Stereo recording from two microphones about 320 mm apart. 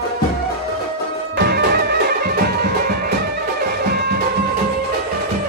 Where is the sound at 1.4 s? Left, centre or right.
Right.